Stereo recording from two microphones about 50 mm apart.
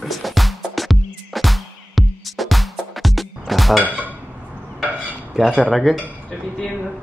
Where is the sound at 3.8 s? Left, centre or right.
Right.